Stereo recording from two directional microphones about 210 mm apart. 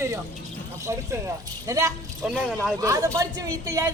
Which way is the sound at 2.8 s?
15° right (ahead or behind).